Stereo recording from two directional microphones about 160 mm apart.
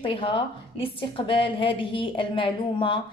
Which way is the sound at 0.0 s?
35° left (ahead or behind).